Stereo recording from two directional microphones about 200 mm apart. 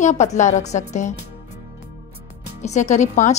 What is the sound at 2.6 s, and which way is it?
Speech, 35° left (ahead or behind).